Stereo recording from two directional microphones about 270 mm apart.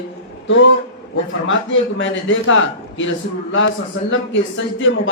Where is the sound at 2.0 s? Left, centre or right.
Left.